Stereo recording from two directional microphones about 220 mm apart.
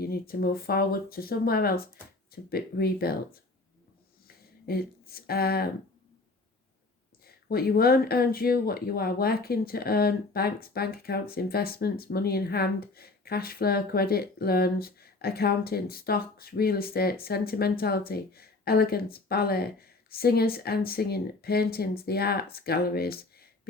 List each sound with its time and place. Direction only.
0.0 s speech: 45° left (ahead or behind)
4.6 s speech: 45° left (ahead or behind)
7.3 s speech: 45° left (ahead or behind)